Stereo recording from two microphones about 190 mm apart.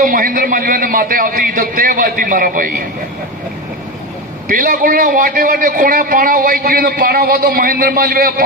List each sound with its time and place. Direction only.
0.0 s a man's voice: 50° right (ahead or behind)
4.4 s a man's voice: 45° right (ahead or behind)